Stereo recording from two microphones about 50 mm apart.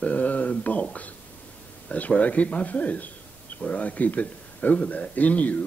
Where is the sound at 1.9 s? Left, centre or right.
Left.